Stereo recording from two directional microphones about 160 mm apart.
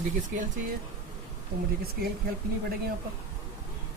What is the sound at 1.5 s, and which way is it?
Speech, 75° right (ahead or behind).